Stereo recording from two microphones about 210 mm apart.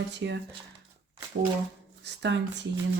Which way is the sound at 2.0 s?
55° right (ahead or behind).